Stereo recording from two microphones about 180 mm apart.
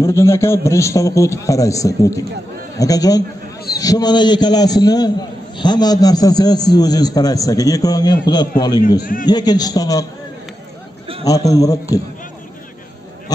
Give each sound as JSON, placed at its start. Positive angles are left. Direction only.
{"t": 0.0, "sound": "a man's voice", "side_deg": 15}
{"t": 11.2, "sound": "a man's voice", "side_deg": 20}